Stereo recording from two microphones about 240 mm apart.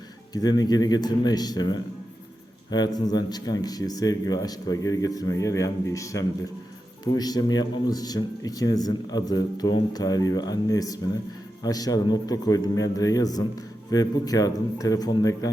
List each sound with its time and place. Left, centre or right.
0.3 s speech: centre